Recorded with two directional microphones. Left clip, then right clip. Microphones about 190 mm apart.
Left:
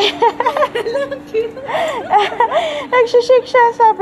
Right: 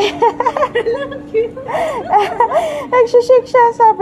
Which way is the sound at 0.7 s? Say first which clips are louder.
Right 2 dB; 50° left (ahead or behind).